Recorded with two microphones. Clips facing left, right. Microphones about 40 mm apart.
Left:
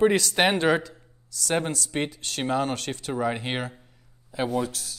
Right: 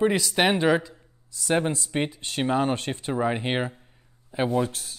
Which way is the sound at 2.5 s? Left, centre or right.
Right.